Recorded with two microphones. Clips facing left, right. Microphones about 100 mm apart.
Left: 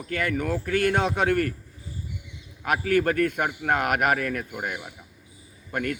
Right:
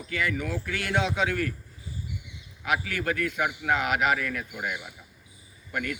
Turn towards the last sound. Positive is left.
turn(degrees=50)  # may be behind; listen again after turning